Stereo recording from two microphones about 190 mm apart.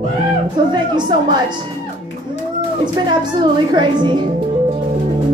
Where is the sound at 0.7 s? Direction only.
25° right (ahead or behind).